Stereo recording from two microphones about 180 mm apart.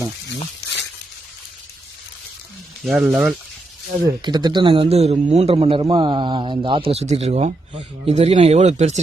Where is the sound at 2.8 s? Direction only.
Centre (ahead or behind).